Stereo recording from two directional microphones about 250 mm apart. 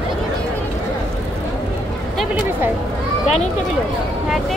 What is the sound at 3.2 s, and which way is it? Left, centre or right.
Run, left.